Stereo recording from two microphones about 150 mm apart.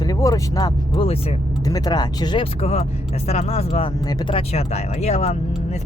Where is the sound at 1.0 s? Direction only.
40° left (ahead or behind).